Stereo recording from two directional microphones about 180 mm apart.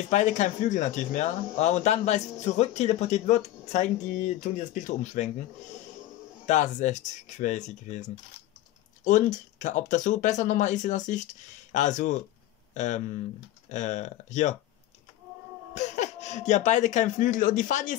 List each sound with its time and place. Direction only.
0.1 s speech: 40° left (ahead or behind)
6.4 s speech: 40° left (ahead or behind)
15.7 s speech: 40° left (ahead or behind)